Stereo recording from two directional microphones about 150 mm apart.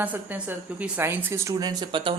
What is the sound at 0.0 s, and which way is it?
A woman's voice, 10° right (ahead or behind).